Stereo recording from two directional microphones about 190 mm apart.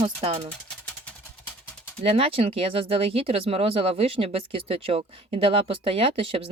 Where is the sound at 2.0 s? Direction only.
30° right (ahead or behind).